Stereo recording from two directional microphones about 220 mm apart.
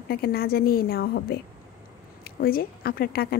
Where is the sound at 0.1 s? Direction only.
45° left (ahead or behind).